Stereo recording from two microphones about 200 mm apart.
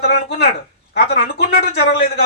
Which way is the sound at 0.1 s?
55° left (ahead or behind).